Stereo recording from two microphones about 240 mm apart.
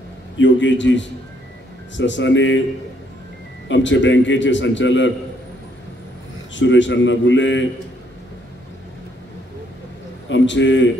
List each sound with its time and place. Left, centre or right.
0.4 s speech: left
3.6 s speech: left
6.5 s speech: left
10.2 s a man's voice: left